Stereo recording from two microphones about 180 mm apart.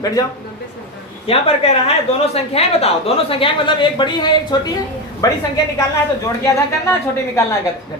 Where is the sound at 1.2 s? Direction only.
35° left (ahead or behind); by 5.4 s 20° left (ahead or behind).